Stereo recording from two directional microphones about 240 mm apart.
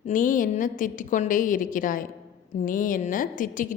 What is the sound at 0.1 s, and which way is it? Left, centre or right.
A woman's voice, left.